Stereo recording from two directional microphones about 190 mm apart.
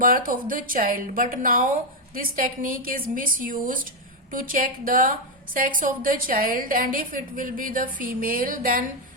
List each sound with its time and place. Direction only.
0.0 s a woman's voice: 45° right (ahead or behind)